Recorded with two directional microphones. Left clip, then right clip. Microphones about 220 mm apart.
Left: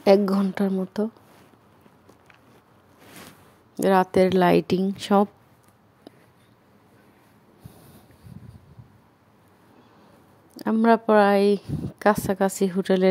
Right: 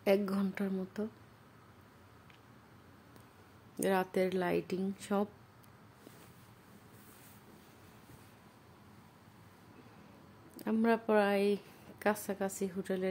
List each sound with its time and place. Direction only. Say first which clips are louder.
0.0 s speech: left 13 dB; 30° left (ahead or behind)
3.7 s speech: left 13 dB; 30° left (ahead or behind)
10.5 s speech: left 12 dB; 30° left (ahead or behind)